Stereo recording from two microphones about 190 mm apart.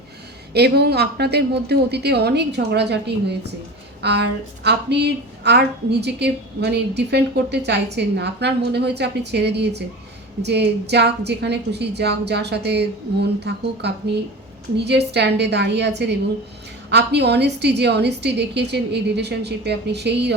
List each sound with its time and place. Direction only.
0.5 s a woman's voice: 60° right (ahead or behind)